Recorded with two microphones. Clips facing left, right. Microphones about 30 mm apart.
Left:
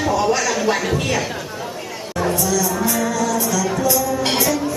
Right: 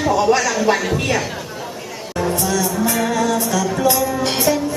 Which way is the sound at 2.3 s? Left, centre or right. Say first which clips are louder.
Even; right.